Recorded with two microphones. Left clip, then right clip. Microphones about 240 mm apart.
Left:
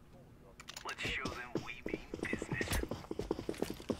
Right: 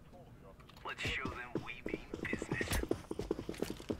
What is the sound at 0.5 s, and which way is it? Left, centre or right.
Typing, left.